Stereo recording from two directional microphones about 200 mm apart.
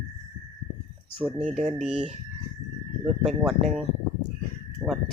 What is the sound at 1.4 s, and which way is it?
Speech, 35° right (ahead or behind).